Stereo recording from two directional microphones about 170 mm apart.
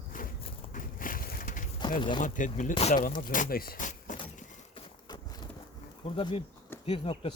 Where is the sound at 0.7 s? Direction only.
55° left (ahead or behind).